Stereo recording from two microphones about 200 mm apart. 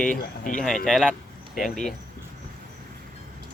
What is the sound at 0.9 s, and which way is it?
Speech, 5° left (ahead or behind).